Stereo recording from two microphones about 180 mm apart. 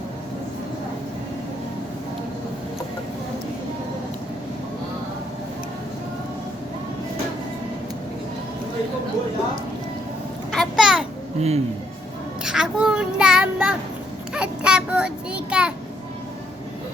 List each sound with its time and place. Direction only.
10.5 s a sound: centre (ahead or behind)
11.3 s speech: 35° right (ahead or behind)
12.5 s child singing: 5° right (ahead or behind)